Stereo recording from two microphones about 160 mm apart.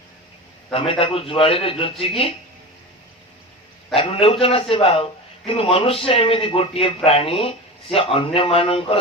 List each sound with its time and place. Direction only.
0.7 s speech: 35° left (ahead or behind)
3.9 s speech: 35° left (ahead or behind)